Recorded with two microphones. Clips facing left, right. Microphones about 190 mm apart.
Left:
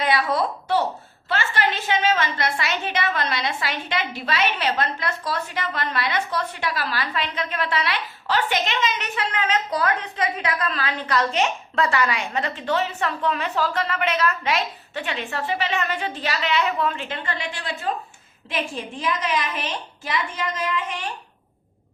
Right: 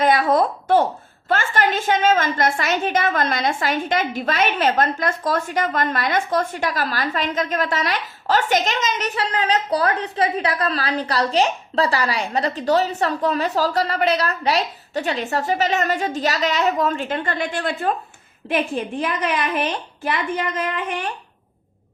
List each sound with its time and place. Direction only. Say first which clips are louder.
0.0 s a woman's voice: right 5 dB; 45° right (ahead or behind)